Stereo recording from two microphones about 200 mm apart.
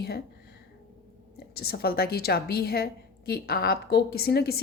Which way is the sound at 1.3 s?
50° left (ahead or behind).